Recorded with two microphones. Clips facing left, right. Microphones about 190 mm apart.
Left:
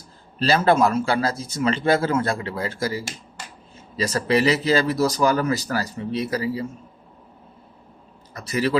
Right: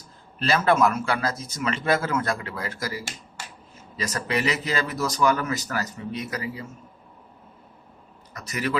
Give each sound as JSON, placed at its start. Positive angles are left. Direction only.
{"t": 0.3, "sound": "speech", "side_deg": 30}
{"t": 8.3, "sound": "speech", "side_deg": 30}